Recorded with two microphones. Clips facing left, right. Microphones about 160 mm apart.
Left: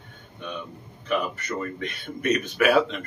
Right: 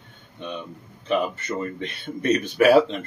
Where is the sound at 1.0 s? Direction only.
25° right (ahead or behind).